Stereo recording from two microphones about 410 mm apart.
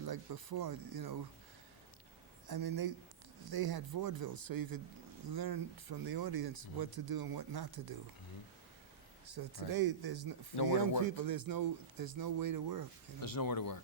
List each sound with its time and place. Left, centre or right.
0.0 s speech: right
2.5 s speech: right
9.3 s speech: right
10.6 s speech: left
11.0 s speech: right
13.2 s speech: left